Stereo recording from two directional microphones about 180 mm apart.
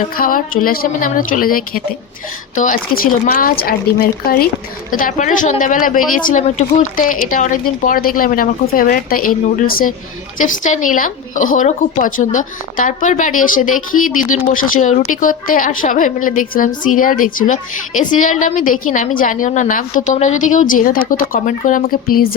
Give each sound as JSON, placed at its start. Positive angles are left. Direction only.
{"t": 0.2, "sound": "speech", "side_deg": 50}
{"t": 4.9, "sound": "speech", "side_deg": 50}